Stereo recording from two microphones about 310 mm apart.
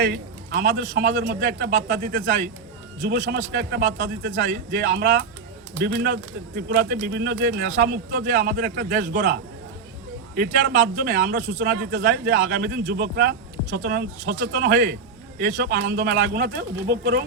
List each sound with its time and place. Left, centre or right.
0.0 s speech: right